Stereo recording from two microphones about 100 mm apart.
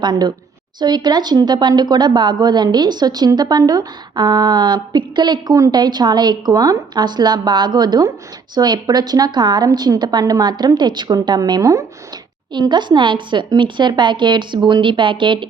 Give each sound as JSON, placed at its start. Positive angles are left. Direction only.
{"t": 0.0, "sound": "speech", "side_deg": -45}
{"t": 12.5, "sound": "speech", "side_deg": -50}